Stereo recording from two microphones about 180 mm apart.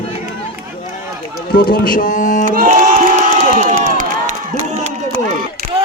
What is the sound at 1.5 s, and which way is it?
Speech, 55° left (ahead or behind).